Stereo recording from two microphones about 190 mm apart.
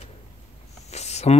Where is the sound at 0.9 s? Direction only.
35° left (ahead or behind).